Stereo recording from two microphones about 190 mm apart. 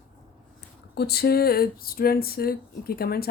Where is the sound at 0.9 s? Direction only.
60° left (ahead or behind).